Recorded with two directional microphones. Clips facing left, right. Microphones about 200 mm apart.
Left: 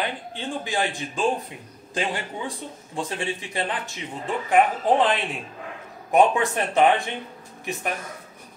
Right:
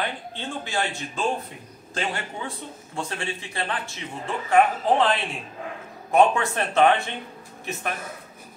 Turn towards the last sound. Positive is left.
turn(degrees=15)  # may be behind; listen again after turning